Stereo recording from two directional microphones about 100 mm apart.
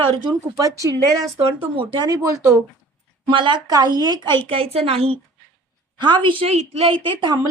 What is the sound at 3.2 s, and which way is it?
Speech, 50° right (ahead or behind).